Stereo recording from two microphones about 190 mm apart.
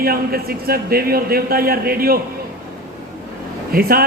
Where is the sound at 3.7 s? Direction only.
50° right (ahead or behind).